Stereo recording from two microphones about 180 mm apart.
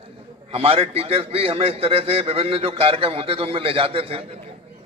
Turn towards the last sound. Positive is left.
turn(degrees=-30)  # may be behind; listen again after turning